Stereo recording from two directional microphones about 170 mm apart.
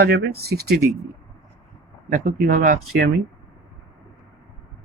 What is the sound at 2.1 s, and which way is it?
Speech, 50° right (ahead or behind).